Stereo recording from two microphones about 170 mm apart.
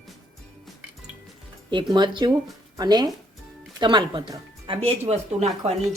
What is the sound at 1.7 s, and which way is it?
Speech, 25° right (ahead or behind).